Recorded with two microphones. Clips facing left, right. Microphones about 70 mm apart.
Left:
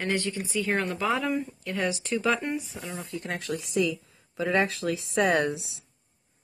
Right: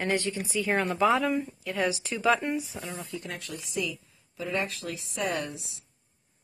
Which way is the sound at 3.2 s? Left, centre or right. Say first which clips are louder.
Left 6 dB; left.